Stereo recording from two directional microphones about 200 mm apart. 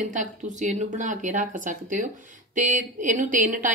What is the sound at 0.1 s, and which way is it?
A woman's voice, 40° right (ahead or behind).